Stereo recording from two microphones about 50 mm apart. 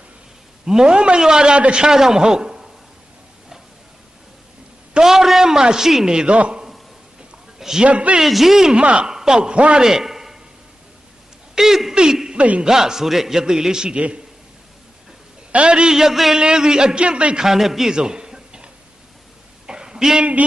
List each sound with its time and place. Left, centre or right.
0.6 s a man's voice: centre
4.9 s a man's voice: centre; by 6.6 s right
7.2 s a sound: centre
7.9 s speech: right
8.2 s a man's voice: centre
8.7 s speech: right
9.0 s a man's voice: centre
9.8 s a sound: centre
11.5 s speech: centre
12.4 s speech: right
12.6 s a man's voice: centre
15.5 s a man's voice: centre
17.4 s a man's voice: centre
19.6 s a sound: centre